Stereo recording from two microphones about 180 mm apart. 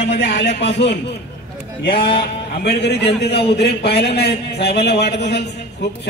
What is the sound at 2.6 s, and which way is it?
A man's voice, 70° left (ahead or behind).